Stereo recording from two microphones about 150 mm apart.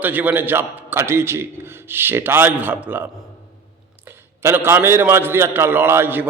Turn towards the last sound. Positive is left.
turn(degrees=-15)  # may be behind; listen again after turning